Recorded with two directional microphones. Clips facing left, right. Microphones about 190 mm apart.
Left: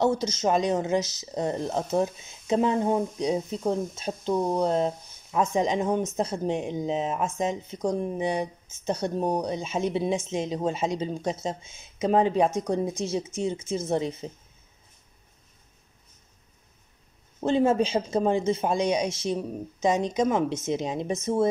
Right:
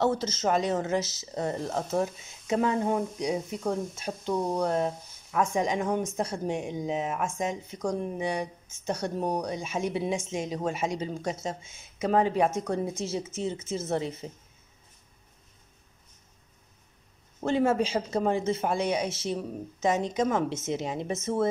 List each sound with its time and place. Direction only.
0.0 s a woman's voice: 15° left (ahead or behind)
17.4 s speech: 20° left (ahead or behind)